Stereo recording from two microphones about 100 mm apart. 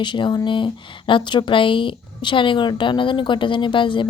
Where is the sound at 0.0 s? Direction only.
50° left (ahead or behind).